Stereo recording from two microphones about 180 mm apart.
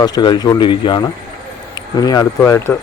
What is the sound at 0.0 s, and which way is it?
Speech, 25° left (ahead or behind).